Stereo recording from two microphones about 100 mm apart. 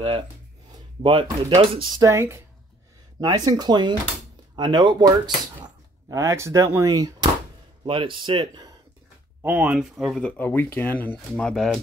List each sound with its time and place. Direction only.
1.0 s speech: 60° right (ahead or behind)
2.0 s speech: 30° right (ahead or behind)
3.2 s speech: 40° right (ahead or behind)
6.0 s speech: 30° right (ahead or behind)
7.8 s speech: 60° right (ahead or behind)
9.4 s speech: 15° right (ahead or behind)
9.9 s speech: centre (ahead or behind)
10.2 s speech: 15° left (ahead or behind)
11.5 s speech: centre (ahead or behind)